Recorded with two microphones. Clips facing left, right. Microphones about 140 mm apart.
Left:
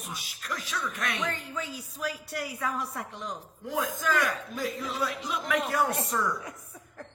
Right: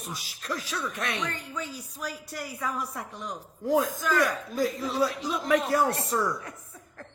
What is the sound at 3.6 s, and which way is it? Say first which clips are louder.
Speech: right 7 dB; 35° right (ahead or behind).